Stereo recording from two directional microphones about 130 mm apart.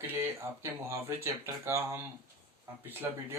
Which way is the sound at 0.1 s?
20° right (ahead or behind).